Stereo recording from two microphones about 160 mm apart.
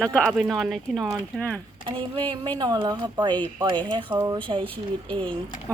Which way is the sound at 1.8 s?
30° right (ahead or behind).